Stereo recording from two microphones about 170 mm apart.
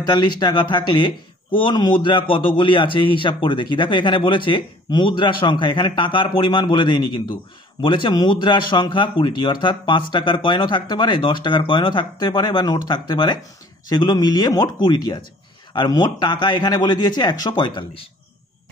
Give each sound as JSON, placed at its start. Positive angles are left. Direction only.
{"t": 0.0, "sound": "speech", "side_deg": 25}